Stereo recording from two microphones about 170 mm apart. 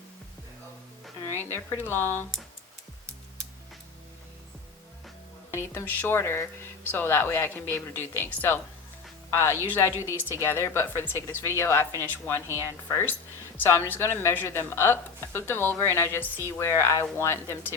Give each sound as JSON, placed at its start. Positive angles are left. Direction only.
{"t": 1.2, "sound": "speech", "side_deg": 15}
{"t": 5.5, "sound": "speech", "side_deg": 15}